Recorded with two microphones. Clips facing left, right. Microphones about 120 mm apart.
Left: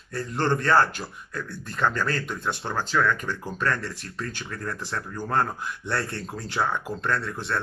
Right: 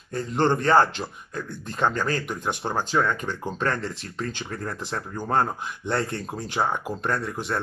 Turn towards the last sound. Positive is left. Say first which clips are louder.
# right 1 dB
turn(degrees=-15)  # may be behind; listen again after turning